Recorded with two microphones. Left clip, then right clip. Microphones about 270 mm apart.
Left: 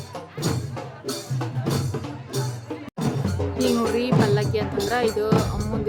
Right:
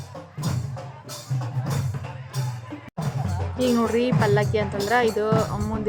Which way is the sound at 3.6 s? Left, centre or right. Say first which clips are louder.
Right 1 dB; centre.